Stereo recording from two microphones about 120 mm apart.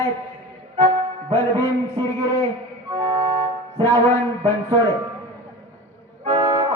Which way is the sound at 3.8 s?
25° left (ahead or behind).